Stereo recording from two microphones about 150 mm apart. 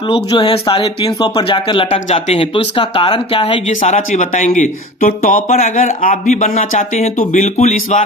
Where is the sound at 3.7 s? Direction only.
50° left (ahead or behind).